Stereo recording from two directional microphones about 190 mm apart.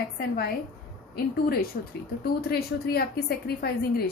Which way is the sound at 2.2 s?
55° left (ahead or behind).